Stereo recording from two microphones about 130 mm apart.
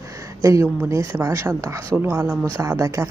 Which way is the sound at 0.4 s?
25° right (ahead or behind).